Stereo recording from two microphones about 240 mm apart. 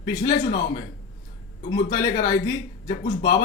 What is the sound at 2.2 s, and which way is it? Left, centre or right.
Speech, centre.